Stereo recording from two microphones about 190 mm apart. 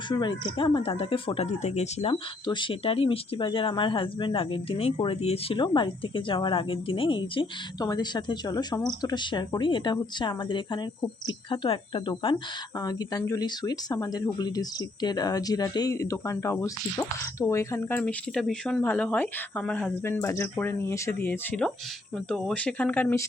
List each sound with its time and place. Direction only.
0.1 s speech: 25° left (ahead or behind); by 23.2 s 10° left (ahead or behind)